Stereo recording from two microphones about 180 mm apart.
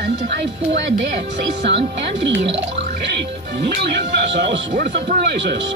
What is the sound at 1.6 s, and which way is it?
Speech, 80° right.